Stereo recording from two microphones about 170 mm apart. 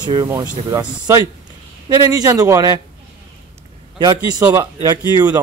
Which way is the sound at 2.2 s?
20° right (ahead or behind).